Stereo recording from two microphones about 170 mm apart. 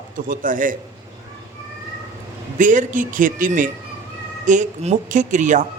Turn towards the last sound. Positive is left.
turn(degrees=-45)  # may be behind; listen again after turning